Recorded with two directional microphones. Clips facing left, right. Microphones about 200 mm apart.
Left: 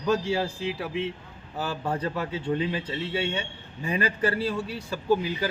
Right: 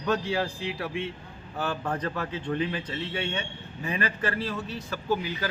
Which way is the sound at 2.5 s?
30° left (ahead or behind).